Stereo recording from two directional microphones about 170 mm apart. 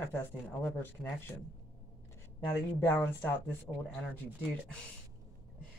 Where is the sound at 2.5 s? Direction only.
15° left (ahead or behind).